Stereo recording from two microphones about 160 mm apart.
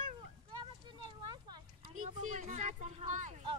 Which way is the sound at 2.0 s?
45° right (ahead or behind).